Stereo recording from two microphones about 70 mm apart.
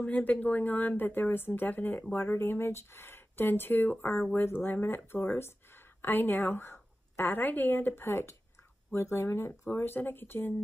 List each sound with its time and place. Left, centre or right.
0.0 s a woman's voice: left